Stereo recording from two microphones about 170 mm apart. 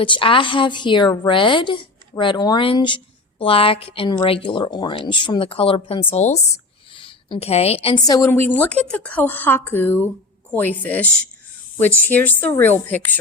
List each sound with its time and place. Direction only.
0.0 s a woman's voice: 30° left (ahead or behind)
8.0 s a woman's voice: 20° left (ahead or behind)
8.3 s speech: 10° left (ahead or behind)